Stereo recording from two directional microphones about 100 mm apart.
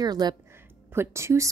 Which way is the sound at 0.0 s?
45° right (ahead or behind).